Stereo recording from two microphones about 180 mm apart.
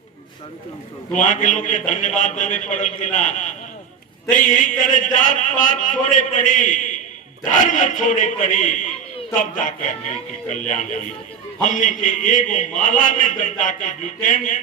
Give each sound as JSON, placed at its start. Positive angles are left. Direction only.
{"t": 1.1, "sound": "a man's voice", "side_deg": 45}